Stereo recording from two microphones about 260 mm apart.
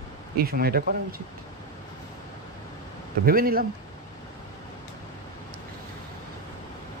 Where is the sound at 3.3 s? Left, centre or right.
Right.